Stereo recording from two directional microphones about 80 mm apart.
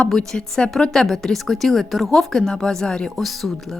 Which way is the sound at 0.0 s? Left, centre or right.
Centre.